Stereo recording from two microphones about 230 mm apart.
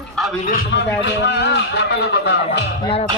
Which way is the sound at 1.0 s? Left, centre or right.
Left.